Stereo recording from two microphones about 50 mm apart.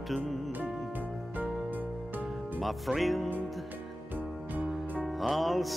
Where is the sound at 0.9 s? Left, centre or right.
Right.